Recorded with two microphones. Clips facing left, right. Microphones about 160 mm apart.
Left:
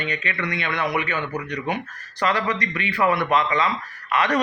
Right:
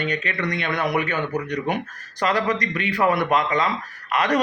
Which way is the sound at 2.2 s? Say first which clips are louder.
Right 1 dB; 45° right (ahead or behind).